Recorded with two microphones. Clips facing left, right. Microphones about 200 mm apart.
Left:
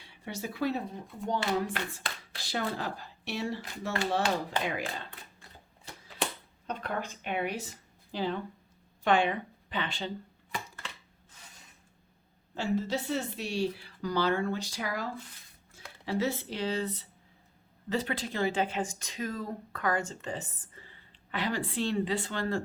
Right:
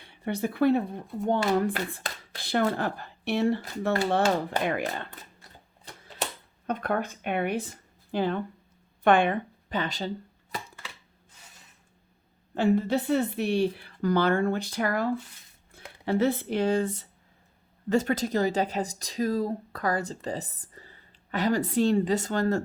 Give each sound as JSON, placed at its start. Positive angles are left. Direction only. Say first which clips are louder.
{"t": 0.0, "sound": "a woman's voice", "louder": "right 9 dB", "side_deg": -55}
{"t": 2.0, "sound": "speech", "louder": "right 2 dB", "side_deg": -40}
{"t": 2.4, "sound": "a woman's voice", "louder": "right 8 dB", "side_deg": -55}
{"t": 6.7, "sound": "speech", "louder": "right 7 dB", "side_deg": -50}
{"t": 12.5, "sound": "a woman's voice", "louder": "right 7 dB", "side_deg": -55}